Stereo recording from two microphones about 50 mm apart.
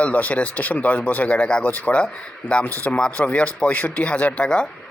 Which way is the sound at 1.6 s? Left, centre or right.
Left.